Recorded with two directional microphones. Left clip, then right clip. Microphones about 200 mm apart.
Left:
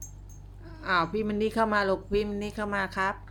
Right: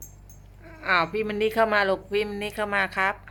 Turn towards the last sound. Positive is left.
turn(degrees=0)  # may be behind; listen again after turning